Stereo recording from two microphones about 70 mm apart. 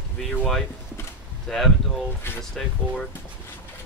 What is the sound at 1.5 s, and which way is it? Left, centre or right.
Speech, centre.